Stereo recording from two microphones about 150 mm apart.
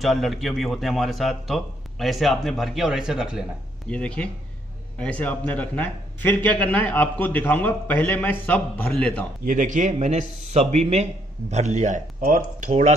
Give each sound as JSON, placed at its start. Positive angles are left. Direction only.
{"t": 0.0, "sound": "a man's voice", "side_deg": 0}
{"t": 3.9, "sound": "a man's voice", "side_deg": 5}
{"t": 9.4, "sound": "speech", "side_deg": -60}